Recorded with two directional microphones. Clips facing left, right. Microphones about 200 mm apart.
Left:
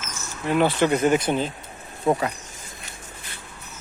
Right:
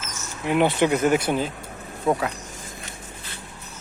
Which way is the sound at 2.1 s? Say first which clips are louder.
Left 1 dB; 5° left (ahead or behind).